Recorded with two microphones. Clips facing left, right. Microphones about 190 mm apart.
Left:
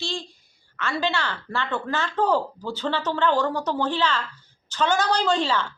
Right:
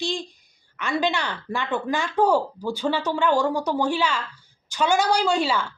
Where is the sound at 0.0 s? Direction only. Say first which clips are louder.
Right 4 dB; 15° right (ahead or behind).